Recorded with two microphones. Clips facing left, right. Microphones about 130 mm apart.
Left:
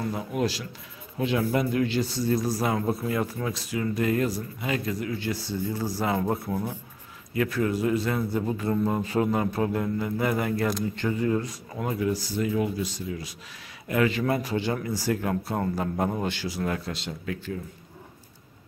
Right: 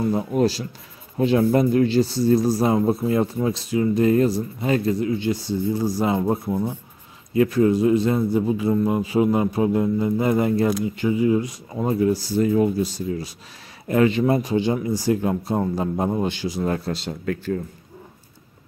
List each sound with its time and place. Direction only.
0.1 s speech: 35° right (ahead or behind)
10.7 s speech: 10° right (ahead or behind)
11.8 s speech: 30° right (ahead or behind)
16.6 s speech: 35° right (ahead or behind)